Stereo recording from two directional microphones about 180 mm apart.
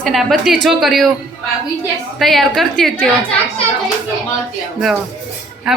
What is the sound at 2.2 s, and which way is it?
Speech, centre (ahead or behind).